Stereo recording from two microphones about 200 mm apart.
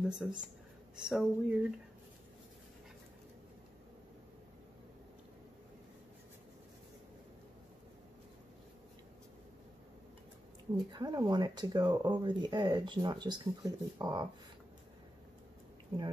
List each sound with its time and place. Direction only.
0.0 s a woman's voice: 5° right (ahead or behind)
10.9 s speech: 20° right (ahead or behind)